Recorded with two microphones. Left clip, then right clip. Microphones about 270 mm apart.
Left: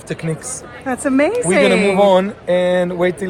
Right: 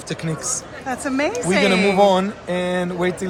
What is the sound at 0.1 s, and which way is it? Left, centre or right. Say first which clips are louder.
Speech: left 1 dB; left.